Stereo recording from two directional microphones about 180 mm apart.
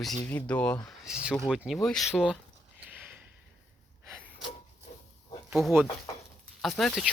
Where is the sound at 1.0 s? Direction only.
5° right (ahead or behind).